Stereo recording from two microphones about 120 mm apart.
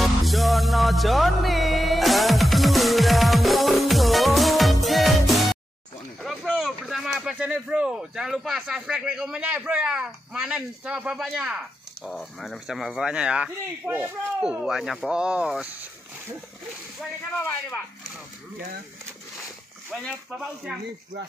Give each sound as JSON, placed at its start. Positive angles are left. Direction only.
{"t": 0.0, "sound": "music", "side_deg": 0}
{"t": 6.2, "sound": "speech", "side_deg": 5}
{"t": 17.4, "sound": "speech", "side_deg": 20}
{"t": 20.2, "sound": "speech", "side_deg": -5}